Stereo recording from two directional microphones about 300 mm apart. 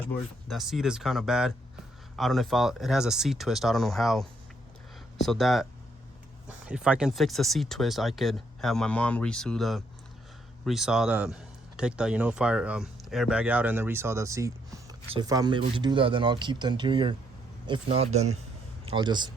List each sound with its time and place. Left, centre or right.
0.1 s speech: centre
6.7 s a man's voice: centre